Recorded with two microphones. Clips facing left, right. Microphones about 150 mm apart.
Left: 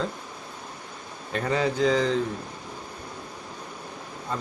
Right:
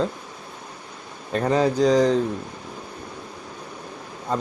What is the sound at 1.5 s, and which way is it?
Speech, 40° right (ahead or behind).